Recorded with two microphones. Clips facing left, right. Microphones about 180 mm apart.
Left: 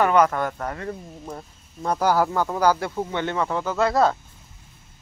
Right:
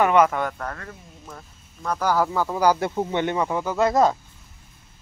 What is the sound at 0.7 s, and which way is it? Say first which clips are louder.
Speech: left 8 dB; 30° left (ahead or behind).